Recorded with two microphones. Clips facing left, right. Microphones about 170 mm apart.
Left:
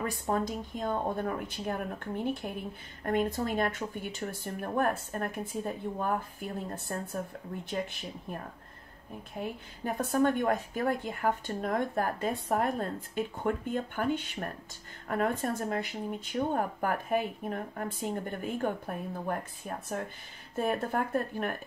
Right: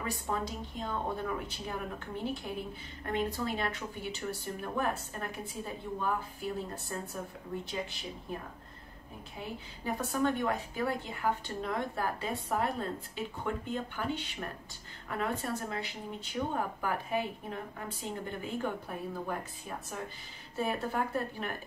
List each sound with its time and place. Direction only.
0.0 s a woman's voice: 45° left (ahead or behind)
9.4 s a woman's voice: 50° left (ahead or behind)
20.5 s a woman's voice: 50° left (ahead or behind)